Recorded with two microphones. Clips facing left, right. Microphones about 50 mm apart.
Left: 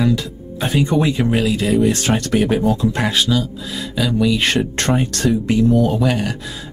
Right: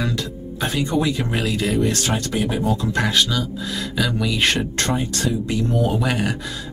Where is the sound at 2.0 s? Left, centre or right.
Left.